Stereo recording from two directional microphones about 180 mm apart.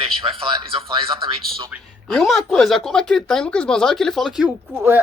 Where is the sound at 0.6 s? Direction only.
30° right (ahead or behind).